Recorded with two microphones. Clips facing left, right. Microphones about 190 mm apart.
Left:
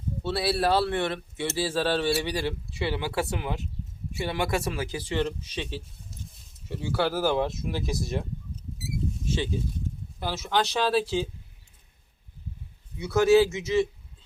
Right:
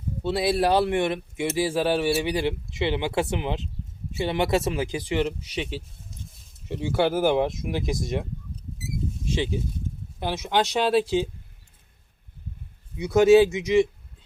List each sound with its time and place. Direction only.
0.2 s speech: 15° right (ahead or behind)
9.2 s speech: 15° right (ahead or behind)
13.0 s speech: 20° right (ahead or behind)